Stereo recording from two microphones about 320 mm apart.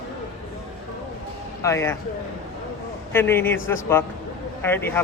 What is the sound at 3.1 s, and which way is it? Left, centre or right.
A man's voice, centre.